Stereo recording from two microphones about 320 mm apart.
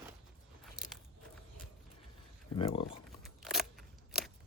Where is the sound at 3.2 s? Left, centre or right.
Centre.